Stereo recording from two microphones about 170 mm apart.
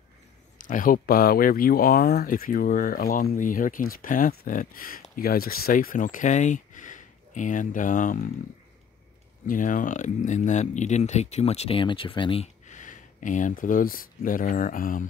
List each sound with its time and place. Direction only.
0.6 s speech: 50° left (ahead or behind)
9.5 s speech: 50° left (ahead or behind); by 12.4 s 30° left (ahead or behind)
12.6 s speech: 50° left (ahead or behind)